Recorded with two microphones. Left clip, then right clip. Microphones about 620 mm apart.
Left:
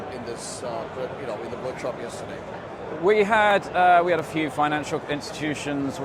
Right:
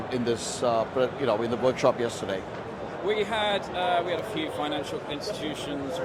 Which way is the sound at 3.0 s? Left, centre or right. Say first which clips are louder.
Left 8 dB; left.